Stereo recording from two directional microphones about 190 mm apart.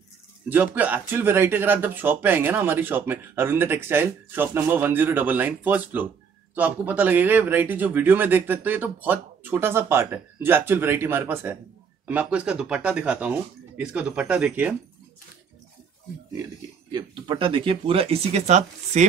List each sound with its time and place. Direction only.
0.5 s speech: 10° right (ahead or behind)
16.9 s speech: 25° right (ahead or behind)